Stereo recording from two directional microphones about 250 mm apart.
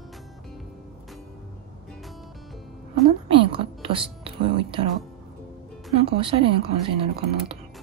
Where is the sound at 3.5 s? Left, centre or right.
Right.